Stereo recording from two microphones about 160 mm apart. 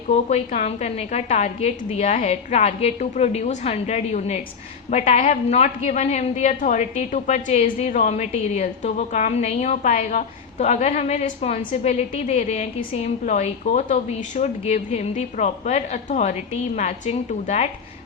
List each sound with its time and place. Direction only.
0.1 s a woman's voice: 45° left (ahead or behind)